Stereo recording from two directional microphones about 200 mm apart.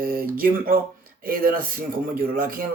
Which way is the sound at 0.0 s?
45° right (ahead or behind).